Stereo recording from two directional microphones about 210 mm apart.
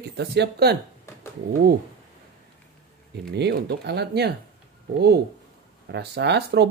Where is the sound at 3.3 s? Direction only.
55° right (ahead or behind).